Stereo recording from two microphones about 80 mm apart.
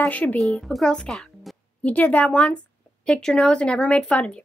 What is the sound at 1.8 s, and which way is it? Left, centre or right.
Speech, centre.